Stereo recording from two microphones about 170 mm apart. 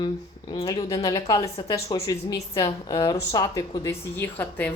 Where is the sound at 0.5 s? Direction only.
20° left (ahead or behind).